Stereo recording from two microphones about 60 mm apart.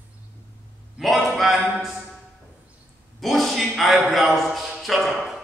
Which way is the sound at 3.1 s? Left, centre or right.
Centre.